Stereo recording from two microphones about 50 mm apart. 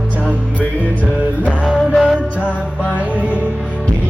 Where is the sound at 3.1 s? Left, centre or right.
Right.